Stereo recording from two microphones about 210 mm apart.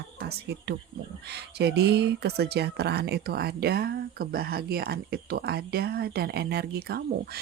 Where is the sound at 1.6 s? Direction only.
50° right (ahead or behind).